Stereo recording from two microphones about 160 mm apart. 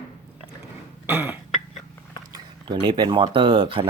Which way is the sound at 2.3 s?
30° right (ahead or behind).